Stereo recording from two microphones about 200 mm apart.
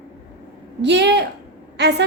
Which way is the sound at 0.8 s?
60° right (ahead or behind).